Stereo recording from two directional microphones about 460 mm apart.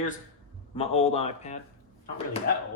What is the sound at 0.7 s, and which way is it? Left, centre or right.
Speech, centre.